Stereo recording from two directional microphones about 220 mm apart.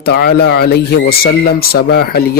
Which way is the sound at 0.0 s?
45° left (ahead or behind).